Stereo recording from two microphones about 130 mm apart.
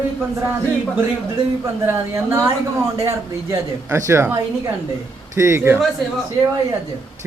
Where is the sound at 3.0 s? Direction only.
20° right (ahead or behind).